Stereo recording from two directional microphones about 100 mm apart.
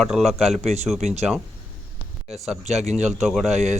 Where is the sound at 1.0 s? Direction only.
90° right.